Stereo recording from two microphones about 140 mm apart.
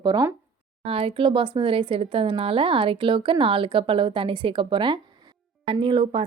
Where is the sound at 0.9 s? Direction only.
40° right (ahead or behind).